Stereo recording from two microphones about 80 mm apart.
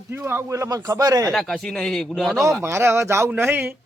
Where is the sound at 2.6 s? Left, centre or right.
Right.